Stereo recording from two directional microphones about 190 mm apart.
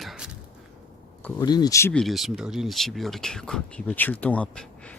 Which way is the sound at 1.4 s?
20° left (ahead or behind).